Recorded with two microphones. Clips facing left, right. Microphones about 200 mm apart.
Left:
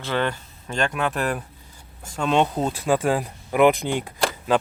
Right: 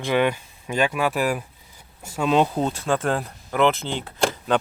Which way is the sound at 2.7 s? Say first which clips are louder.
Left 2 dB; 10° left (ahead or behind).